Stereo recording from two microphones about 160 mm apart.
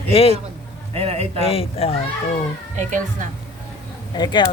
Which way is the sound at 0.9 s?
40° right (ahead or behind).